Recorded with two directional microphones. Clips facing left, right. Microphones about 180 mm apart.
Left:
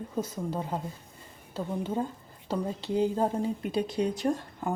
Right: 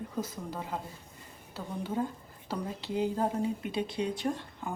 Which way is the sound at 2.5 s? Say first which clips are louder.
Left 5 dB; 25° left (ahead or behind).